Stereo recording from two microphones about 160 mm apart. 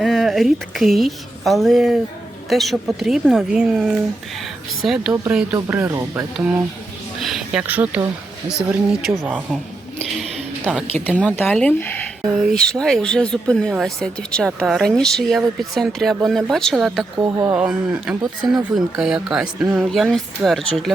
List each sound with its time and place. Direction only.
0.0 s a woman's voice: centre (ahead or behind)
7.2 s speech: centre (ahead or behind)
7.7 s speech: 10° right (ahead or behind)
10.6 s speech: 5° right (ahead or behind)
10.9 s speech: 10° left (ahead or behind)